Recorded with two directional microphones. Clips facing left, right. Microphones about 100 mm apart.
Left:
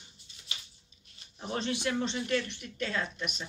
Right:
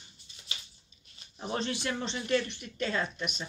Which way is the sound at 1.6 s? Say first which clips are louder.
Left 3 dB; 10° left (ahead or behind).